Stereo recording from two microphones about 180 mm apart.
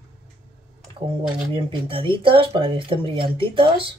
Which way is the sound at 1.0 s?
30° right (ahead or behind).